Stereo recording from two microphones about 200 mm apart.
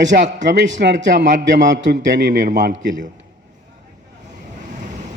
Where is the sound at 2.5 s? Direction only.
65° right (ahead or behind).